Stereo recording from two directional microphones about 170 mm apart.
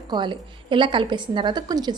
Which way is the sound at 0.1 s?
25° right (ahead or behind).